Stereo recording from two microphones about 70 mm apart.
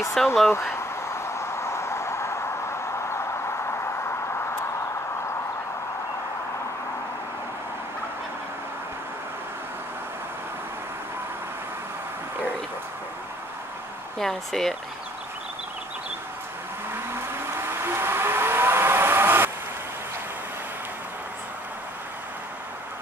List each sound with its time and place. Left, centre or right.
0.2 s speech: centre
0.5 s a sound: left
14.1 s speech: centre
17.5 s vehicle: right